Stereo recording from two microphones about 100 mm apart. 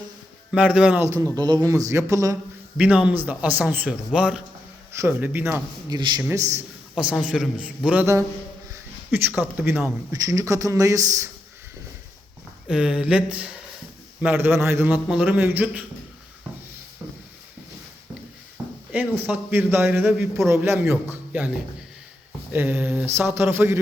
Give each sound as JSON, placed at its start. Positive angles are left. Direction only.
{"t": 0.5, "sound": "speech", "side_deg": -10}
{"t": 0.9, "sound": "speech", "side_deg": -30}
{"t": 1.4, "sound": "speech", "side_deg": -45}
{"t": 2.7, "sound": "speech", "side_deg": -10}
{"t": 4.9, "sound": "a man's voice", "side_deg": -25}
{"t": 5.9, "sound": "a man's voice", "side_deg": -45}
{"t": 6.3, "sound": "speech", "side_deg": -30}
{"t": 6.9, "sound": "speech", "side_deg": -10}
{"t": 9.1, "sound": "a man's voice", "side_deg": -20}
{"t": 10.1, "sound": "speech", "side_deg": -35}
{"t": 12.6, "sound": "speech", "side_deg": -5}
{"t": 14.3, "sound": "a man's voice", "side_deg": -25}
{"t": 18.9, "sound": "a man's voice", "side_deg": -15}
{"t": 22.5, "sound": "a man's voice", "side_deg": -20}